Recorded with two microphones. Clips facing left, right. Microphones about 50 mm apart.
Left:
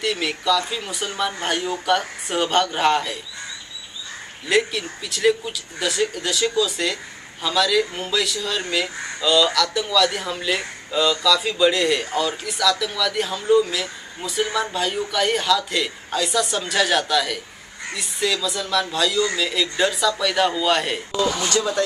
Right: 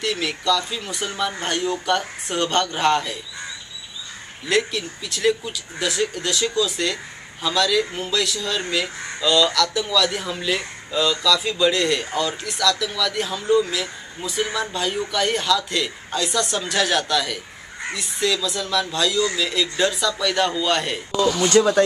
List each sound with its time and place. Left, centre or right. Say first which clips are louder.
0.0 s speech: left 1 dB; centre
4.5 s speech: left 1 dB; centre
21.5 s speech: right 6 dB; right